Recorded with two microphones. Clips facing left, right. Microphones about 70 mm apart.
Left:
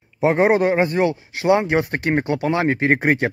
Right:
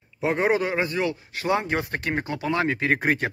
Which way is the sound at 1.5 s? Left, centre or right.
Left.